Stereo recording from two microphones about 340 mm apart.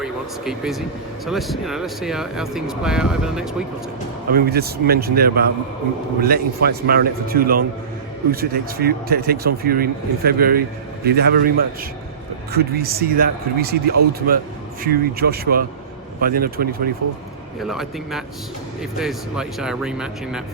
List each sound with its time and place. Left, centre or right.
0.0 s speech: centre
4.3 s a man's voice: right
14.8 s a man's voice: right
17.6 s speech: centre